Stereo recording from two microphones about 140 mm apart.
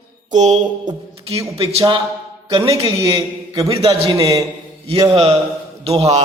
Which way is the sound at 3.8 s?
45° right (ahead or behind).